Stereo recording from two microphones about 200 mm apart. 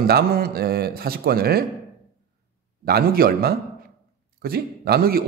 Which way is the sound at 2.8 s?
50° right (ahead or behind).